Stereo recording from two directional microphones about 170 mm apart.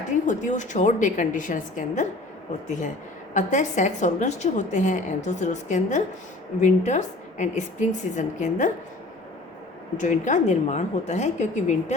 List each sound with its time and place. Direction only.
0.1 s a woman's voice: 45° left (ahead or behind)
10.0 s a woman's voice: 45° left (ahead or behind)